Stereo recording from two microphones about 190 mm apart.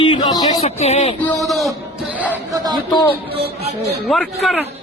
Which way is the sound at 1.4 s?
Centre (ahead or behind).